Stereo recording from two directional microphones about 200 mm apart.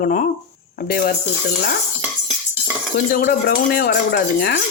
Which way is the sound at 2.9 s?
45° left (ahead or behind).